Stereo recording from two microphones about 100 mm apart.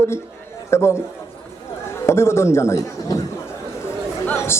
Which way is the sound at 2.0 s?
25° left (ahead or behind).